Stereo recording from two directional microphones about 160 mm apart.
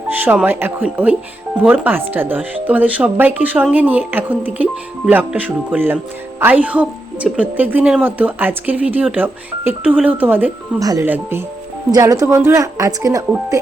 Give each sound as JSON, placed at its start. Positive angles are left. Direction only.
{"t": 0.1, "sound": "a woman's voice", "side_deg": -10}